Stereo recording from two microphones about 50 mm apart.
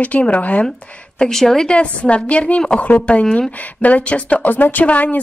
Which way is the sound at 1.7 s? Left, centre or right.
Left.